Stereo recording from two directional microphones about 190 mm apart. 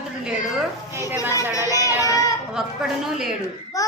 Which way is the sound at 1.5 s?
15° left (ahead or behind).